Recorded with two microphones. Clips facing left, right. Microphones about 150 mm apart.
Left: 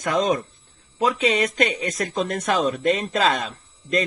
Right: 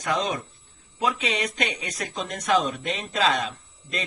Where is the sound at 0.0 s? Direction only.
45° left (ahead or behind).